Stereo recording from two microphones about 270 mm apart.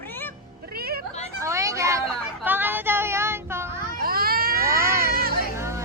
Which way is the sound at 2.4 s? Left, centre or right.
Centre.